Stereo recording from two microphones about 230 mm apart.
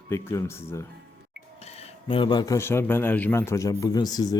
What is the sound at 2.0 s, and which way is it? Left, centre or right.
Speech, left.